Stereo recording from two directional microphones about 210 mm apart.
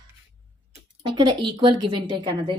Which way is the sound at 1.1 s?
20° right (ahead or behind).